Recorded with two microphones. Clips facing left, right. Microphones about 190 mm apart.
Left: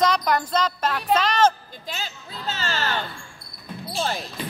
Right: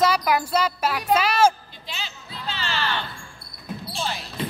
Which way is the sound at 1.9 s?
45° left (ahead or behind).